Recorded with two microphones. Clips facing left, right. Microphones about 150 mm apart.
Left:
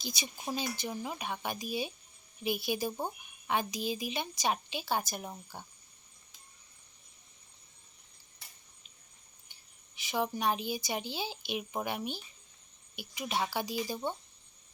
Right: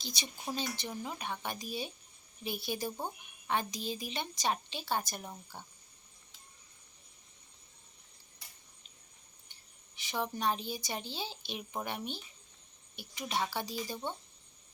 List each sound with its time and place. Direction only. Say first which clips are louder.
0.0 s speech: left 2 dB; 10° left (ahead or behind)
9.5 s a sound: right 1 dB; 10° left (ahead or behind)
10.8 s speech: left 4 dB; 15° left (ahead or behind)